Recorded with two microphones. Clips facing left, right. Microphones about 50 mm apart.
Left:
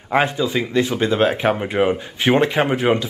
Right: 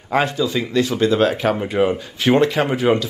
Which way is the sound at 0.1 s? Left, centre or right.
Left.